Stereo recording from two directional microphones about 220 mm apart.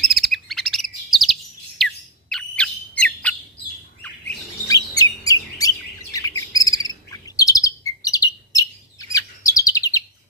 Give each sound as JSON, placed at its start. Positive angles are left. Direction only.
{"t": 0.1, "sound": "bird", "side_deg": 0}
{"t": 1.8, "sound": "squawk", "side_deg": 0}
{"t": 2.3, "sound": "bird", "side_deg": 5}
{"t": 4.7, "sound": "bird", "side_deg": 15}
{"t": 6.5, "sound": "chirp", "side_deg": 15}